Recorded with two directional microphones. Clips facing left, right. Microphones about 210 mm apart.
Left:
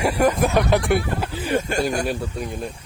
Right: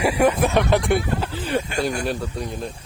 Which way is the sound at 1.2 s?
10° left (ahead or behind).